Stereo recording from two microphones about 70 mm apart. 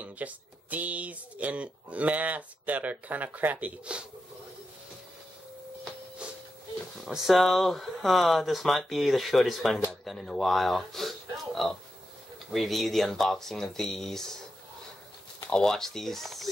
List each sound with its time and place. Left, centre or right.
0.0 s speech: right
6.2 s a sound: centre
7.1 s speech: centre
15.5 s speech: centre